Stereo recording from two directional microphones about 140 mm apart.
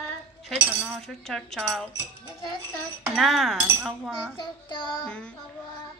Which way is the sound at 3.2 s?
Centre (ahead or behind).